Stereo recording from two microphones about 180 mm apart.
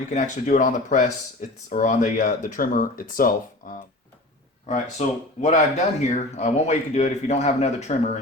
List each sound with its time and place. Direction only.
0.1 s speech: 40° left (ahead or behind)
4.7 s speech: 40° left (ahead or behind)